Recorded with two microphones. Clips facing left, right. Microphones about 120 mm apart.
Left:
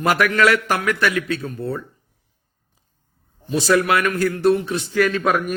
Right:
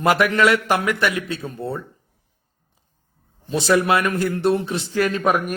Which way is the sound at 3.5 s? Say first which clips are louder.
Even; 25° right (ahead or behind).